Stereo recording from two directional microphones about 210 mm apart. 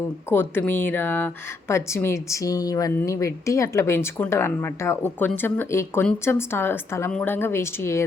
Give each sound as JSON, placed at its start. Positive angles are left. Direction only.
{"t": 0.3, "sound": "speech", "side_deg": 10}